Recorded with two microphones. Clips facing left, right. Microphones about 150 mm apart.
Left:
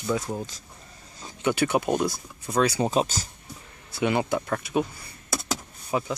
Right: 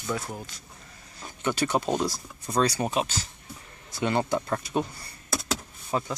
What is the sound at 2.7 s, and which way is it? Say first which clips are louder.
Speech: left 4 dB; 30° left (ahead or behind).